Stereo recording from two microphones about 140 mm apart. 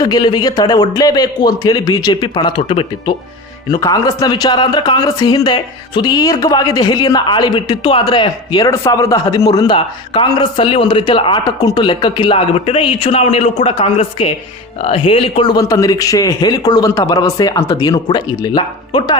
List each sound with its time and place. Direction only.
0.0 s a man's voice: 30° left (ahead or behind)
3.7 s a man's voice: 25° left (ahead or behind)
10.6 s a man's voice: 40° left (ahead or behind)